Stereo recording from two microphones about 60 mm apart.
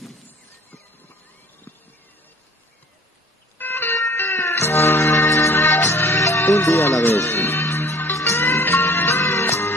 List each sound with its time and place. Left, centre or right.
3.5 s music: left
6.4 s speech: left
7.2 s music: left